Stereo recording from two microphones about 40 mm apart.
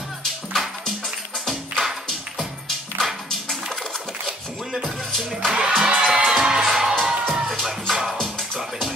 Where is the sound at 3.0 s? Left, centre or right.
Centre.